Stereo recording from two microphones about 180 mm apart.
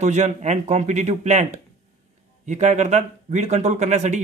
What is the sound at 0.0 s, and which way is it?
Speech, 40° right (ahead or behind).